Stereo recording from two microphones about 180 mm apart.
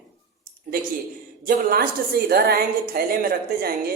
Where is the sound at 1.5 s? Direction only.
55° right (ahead or behind).